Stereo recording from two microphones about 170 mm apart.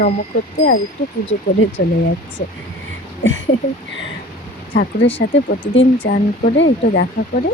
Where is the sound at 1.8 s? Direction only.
65° left (ahead or behind).